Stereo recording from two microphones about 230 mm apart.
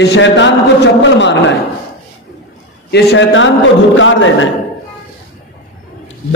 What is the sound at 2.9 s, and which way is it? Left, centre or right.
A man's voice, left.